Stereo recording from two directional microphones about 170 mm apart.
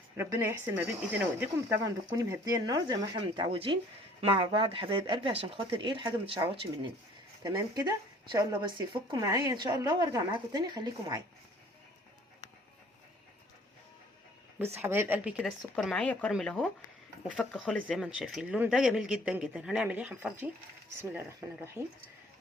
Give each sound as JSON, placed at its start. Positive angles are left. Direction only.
{"t": 0.2, "sound": "a woman's voice", "side_deg": -15}
{"t": 2.1, "sound": "speech", "side_deg": -20}
{"t": 7.5, "sound": "a woman's voice", "side_deg": -15}
{"t": 14.6, "sound": "a woman's voice", "side_deg": -15}